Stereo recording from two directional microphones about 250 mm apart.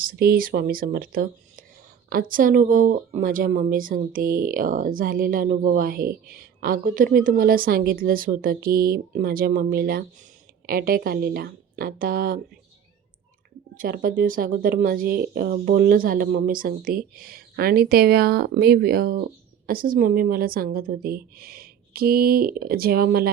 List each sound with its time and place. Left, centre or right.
0.0 s speech: right
13.7 s speech: right